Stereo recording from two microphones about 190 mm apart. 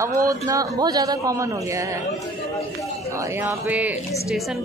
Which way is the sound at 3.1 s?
15° right (ahead or behind).